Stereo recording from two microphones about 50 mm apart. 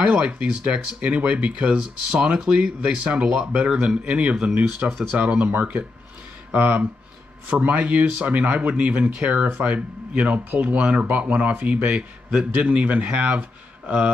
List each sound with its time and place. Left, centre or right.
0.0 s speech: right
5.5 s a man's voice: right
6.5 s a man's voice: right